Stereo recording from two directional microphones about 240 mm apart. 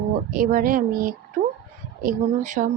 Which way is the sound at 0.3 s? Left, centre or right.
Right.